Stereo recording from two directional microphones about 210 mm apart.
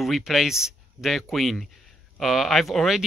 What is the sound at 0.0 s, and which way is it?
Speech, centre (ahead or behind).